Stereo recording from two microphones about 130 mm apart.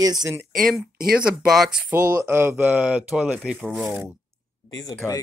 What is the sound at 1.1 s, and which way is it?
Speech, 5° right (ahead or behind).